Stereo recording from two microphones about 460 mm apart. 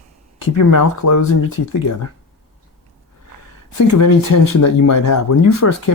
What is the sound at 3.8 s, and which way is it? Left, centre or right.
Speech, left.